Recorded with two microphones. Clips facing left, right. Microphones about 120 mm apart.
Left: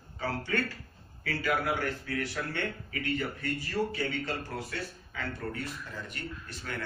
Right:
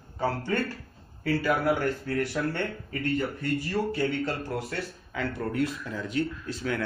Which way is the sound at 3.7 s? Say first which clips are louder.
Right 3 dB; 55° right (ahead or behind).